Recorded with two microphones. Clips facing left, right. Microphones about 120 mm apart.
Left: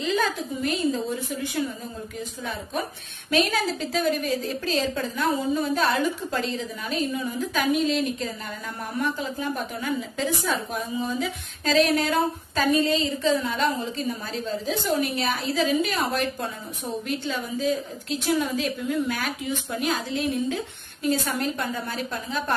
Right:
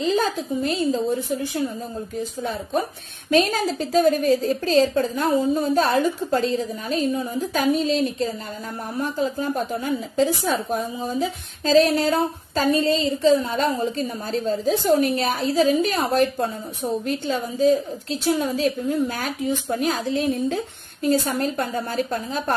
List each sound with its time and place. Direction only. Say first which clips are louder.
0.0 s a woman's voice: right 3 dB; 35° right (ahead or behind)
3.3 s speech: right 4 dB; 40° right (ahead or behind)